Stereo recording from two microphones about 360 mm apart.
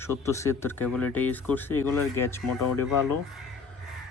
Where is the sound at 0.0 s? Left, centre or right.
Centre.